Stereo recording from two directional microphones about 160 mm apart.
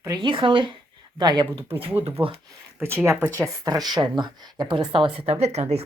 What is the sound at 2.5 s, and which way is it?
Speech, 15° right (ahead or behind).